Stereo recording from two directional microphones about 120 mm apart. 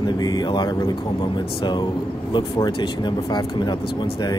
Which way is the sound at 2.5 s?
35° left (ahead or behind).